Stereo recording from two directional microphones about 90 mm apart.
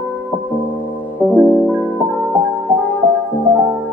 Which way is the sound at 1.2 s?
20° left (ahead or behind).